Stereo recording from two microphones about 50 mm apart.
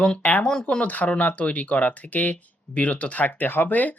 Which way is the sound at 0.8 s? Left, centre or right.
Left.